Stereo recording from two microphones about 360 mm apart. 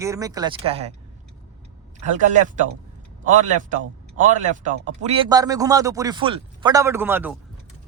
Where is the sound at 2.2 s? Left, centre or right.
Right.